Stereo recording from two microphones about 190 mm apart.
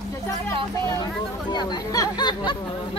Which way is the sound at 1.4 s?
20° left (ahead or behind).